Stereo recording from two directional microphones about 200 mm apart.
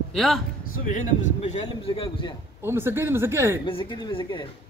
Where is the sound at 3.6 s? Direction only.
25° left (ahead or behind).